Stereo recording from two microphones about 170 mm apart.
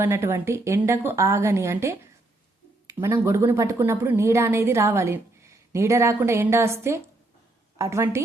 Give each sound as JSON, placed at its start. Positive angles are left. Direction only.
{"t": 0.0, "sound": "a woman's voice", "side_deg": -15}